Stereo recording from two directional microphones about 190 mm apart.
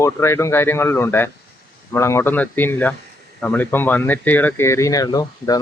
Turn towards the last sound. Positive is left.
turn(degrees=20)  # may be behind; listen again after turning